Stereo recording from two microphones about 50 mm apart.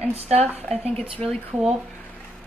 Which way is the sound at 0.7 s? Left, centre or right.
Left.